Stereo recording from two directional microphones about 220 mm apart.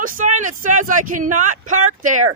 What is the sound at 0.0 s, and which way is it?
Speech, 35° right (ahead or behind).